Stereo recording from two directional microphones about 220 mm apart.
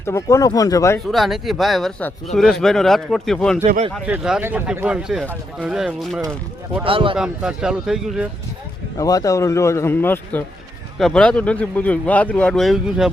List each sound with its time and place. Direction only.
0.0 s a man's voice: 15° left (ahead or behind)
1.1 s speech: centre (ahead or behind)
3.6 s speech: 30° right (ahead or behind)
3.9 s speech: 5° right (ahead or behind)
6.8 s speech: 25° right (ahead or behind)
7.2 s speech: 5° right (ahead or behind)
9.0 s a man's voice: 15° left (ahead or behind); by 13.1 s centre (ahead or behind)